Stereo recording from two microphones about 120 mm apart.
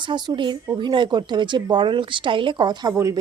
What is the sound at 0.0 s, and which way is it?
Speech, 40° right (ahead or behind).